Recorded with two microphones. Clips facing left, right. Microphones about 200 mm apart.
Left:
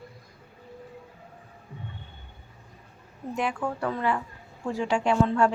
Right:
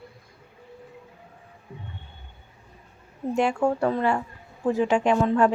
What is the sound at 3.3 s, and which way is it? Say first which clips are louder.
Speech: right 7 dB; 30° right (ahead or behind).